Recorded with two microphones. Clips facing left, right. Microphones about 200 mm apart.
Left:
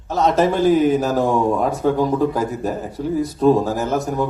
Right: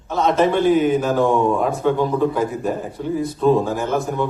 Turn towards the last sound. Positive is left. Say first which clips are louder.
# left 1 dB
turn(degrees=40)  # may be behind; listen again after turning